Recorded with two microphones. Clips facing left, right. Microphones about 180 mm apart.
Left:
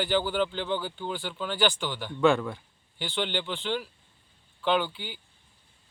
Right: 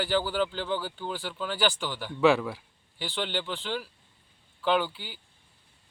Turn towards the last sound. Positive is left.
turn(degrees=-5)  # may be behind; listen again after turning